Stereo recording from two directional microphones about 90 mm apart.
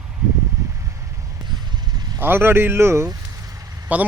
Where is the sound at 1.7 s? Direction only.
50° right (ahead or behind).